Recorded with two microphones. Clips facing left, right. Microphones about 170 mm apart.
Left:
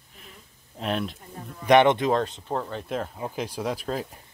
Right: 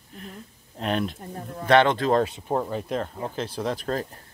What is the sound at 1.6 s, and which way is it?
Speech, 20° left (ahead or behind).